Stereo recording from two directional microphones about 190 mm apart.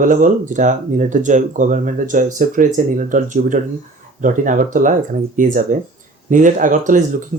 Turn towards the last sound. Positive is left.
turn(degrees=-45)  # may be behind; listen again after turning